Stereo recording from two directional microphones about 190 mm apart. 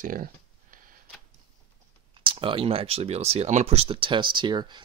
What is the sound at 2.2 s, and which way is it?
Speech, 25° right (ahead or behind).